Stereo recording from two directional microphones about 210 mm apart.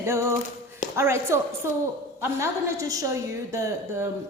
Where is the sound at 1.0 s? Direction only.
15° right (ahead or behind).